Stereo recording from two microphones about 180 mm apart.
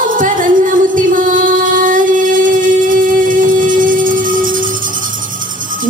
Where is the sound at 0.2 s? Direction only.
50° right (ahead or behind).